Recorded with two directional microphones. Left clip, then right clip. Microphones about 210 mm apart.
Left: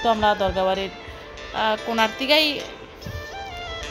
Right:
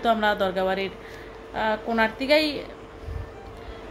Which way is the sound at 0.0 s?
15° left (ahead or behind).